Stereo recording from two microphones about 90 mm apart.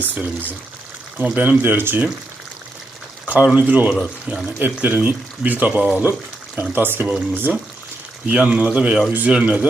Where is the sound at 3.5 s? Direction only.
15° right (ahead or behind).